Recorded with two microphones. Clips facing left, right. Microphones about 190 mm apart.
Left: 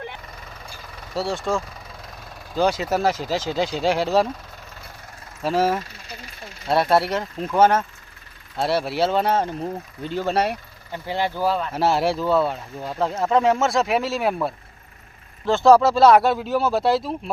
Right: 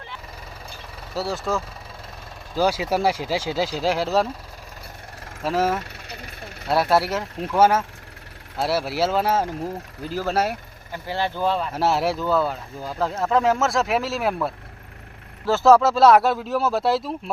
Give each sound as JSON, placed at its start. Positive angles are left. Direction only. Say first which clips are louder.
{"t": 1.1, "sound": "speech", "louder": "left 1 dB", "side_deg": 0}
{"t": 5.4, "sound": "speech", "louder": "left 1 dB", "side_deg": 0}
{"t": 5.8, "sound": "vehicle", "louder": "right 1 dB", "side_deg": -60}
{"t": 6.7, "sound": "speech", "louder": "left 1 dB", "side_deg": 0}
{"t": 10.9, "sound": "speech", "louder": "left 1 dB", "side_deg": 15}